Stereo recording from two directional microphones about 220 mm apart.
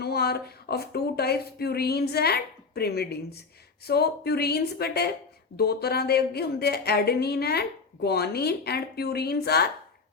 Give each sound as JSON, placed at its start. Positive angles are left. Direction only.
{"t": 0.0, "sound": "a woman's voice", "side_deg": 45}